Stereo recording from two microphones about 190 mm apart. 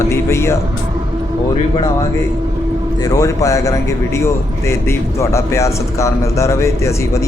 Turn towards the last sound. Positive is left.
turn(degrees=15)  # may be behind; listen again after turning